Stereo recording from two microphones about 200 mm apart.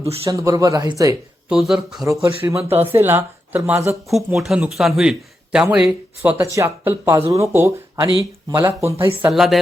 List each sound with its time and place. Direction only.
0.3 s a man's voice: 15° right (ahead or behind)
1.5 s speech: centre (ahead or behind)
2.2 s a man's voice: 15° right (ahead or behind)
9.2 s speech: centre (ahead or behind)